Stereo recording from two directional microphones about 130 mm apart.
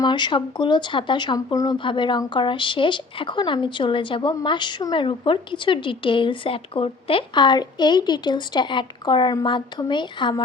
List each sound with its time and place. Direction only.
0.0 s speech: 35° left (ahead or behind)